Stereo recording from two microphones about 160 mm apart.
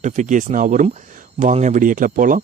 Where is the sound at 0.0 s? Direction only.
50° right (ahead or behind).